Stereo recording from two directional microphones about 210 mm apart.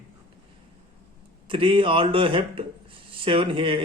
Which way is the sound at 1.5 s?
25° right (ahead or behind).